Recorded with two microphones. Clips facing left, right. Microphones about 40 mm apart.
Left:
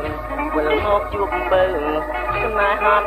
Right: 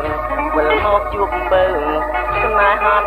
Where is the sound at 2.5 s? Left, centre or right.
Centre.